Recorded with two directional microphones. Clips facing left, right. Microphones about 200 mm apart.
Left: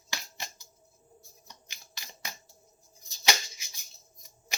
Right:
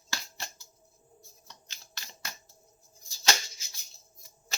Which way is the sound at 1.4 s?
15° left (ahead or behind).